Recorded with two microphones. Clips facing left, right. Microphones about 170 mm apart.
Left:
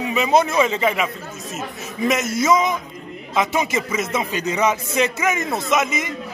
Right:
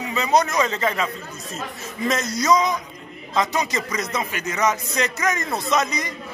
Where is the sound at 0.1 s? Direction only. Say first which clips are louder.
Left 2 dB; 20° left (ahead or behind).